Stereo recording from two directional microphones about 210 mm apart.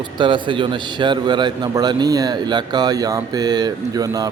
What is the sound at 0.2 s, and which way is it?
A man's voice, 20° right (ahead or behind).